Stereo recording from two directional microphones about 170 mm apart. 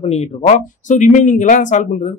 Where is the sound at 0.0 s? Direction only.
40° left (ahead or behind).